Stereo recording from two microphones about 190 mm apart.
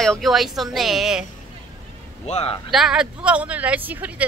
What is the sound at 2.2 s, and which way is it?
Speech, 35° left (ahead or behind).